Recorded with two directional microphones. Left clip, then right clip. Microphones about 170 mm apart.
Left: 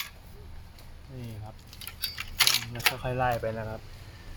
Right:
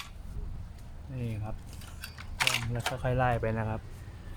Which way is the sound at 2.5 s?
5° right (ahead or behind).